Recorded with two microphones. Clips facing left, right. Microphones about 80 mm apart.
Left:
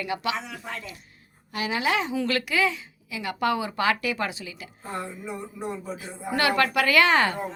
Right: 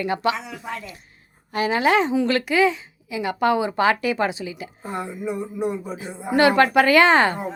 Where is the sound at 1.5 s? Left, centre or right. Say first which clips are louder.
Right 7 dB; right.